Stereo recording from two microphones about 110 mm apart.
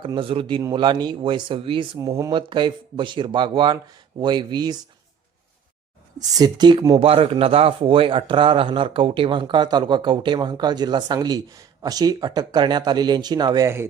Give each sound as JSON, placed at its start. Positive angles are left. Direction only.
{"t": 0.0, "sound": "a man's voice", "side_deg": -50}
{"t": 2.0, "sound": "speech", "side_deg": -30}
{"t": 2.3, "sound": "a man's voice", "side_deg": -45}
{"t": 6.1, "sound": "speech", "side_deg": -40}
{"t": 7.0, "sound": "a man's voice", "side_deg": -55}